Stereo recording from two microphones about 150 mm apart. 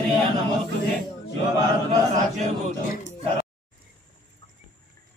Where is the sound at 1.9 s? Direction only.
50° right (ahead or behind).